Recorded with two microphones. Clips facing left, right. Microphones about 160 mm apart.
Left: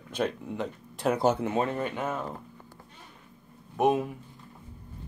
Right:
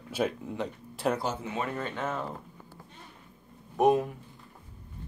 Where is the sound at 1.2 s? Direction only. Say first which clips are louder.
Left 8 dB; 55° left (ahead or behind).